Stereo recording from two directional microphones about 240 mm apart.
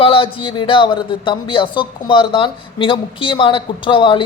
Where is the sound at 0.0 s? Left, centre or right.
Left.